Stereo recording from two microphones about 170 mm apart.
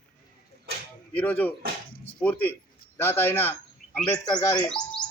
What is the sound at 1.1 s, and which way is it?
A man's voice, 10° left (ahead or behind).